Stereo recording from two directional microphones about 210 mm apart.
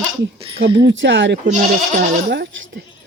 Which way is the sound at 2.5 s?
65° right (ahead or behind).